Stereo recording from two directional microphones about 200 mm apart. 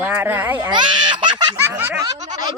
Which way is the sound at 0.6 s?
20° right (ahead or behind).